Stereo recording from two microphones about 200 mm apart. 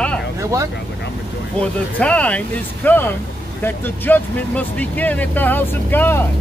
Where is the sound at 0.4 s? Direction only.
15° right (ahead or behind).